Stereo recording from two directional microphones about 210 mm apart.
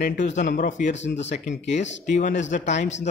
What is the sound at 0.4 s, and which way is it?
Speech, 35° left (ahead or behind).